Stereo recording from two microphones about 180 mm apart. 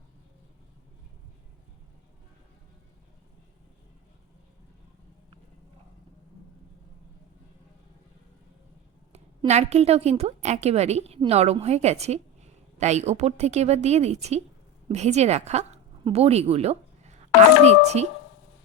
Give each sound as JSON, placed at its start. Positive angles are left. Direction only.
{"t": 9.1, "sound": "a woman's voice", "side_deg": -35}